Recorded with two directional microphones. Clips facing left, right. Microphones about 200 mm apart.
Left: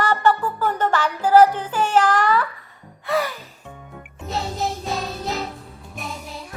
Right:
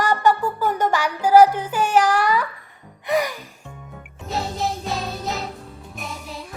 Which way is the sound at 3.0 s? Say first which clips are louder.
Right 1 dB; 15° right (ahead or behind).